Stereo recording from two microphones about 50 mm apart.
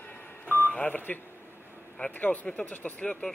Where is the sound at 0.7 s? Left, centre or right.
Left.